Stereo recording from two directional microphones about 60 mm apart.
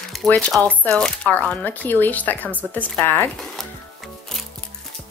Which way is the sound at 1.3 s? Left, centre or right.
Left.